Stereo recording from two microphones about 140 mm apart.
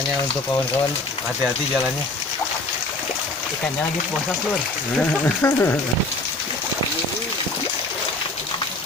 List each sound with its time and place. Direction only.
4.9 s speech: 15° left (ahead or behind)